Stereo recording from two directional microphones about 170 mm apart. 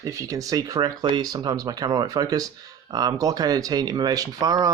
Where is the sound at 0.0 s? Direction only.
20° right (ahead or behind).